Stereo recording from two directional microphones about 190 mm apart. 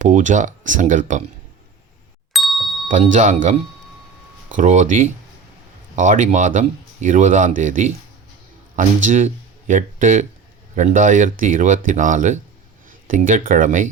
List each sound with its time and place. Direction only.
0.0 s speech: 40° right (ahead or behind)
2.3 s a sound: centre (ahead or behind)
2.9 s speech: 40° right (ahead or behind)
4.5 s speech: 40° right (ahead or behind)
9.0 s speech: 40° right (ahead or behind)